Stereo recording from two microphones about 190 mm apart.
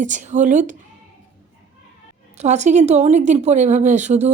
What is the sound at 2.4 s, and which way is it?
A woman's voice, 35° right (ahead or behind).